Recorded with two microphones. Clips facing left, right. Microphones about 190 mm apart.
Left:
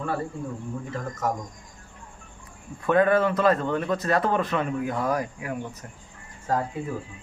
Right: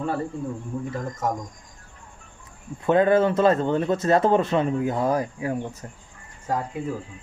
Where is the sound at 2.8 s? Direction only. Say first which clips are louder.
Right 2 dB; 25° right (ahead or behind).